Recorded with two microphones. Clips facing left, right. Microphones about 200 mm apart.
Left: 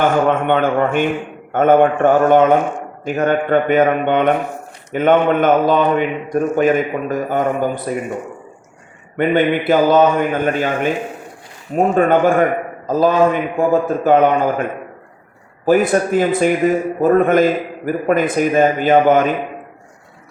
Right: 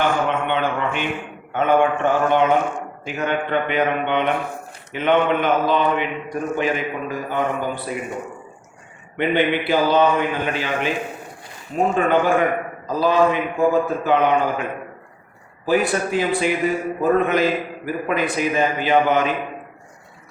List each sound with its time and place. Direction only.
0.3 s speech: 50° left (ahead or behind)
9.1 s speech: 45° left (ahead or behind)